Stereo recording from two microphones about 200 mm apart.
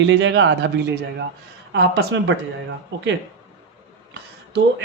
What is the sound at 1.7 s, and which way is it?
Speech, 60° right (ahead or behind).